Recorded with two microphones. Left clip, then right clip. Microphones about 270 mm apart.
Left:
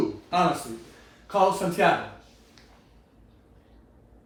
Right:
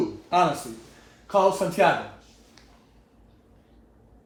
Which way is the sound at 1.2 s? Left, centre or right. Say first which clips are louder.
Right 1 dB; right.